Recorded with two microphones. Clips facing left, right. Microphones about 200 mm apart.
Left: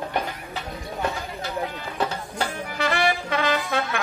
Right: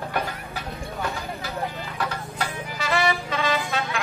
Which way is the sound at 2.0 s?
25° left (ahead or behind).